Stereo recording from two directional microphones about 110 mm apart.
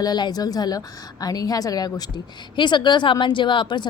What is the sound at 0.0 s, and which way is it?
A woman's voice, 40° left (ahead or behind).